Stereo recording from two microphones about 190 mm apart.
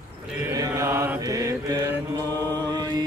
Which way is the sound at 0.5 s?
15° right (ahead or behind).